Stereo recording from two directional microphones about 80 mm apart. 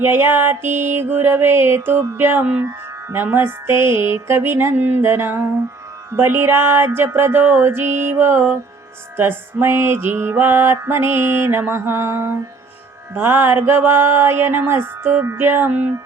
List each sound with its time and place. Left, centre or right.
0.0 s music: right
9.1 s mantra: right
13.1 s music: right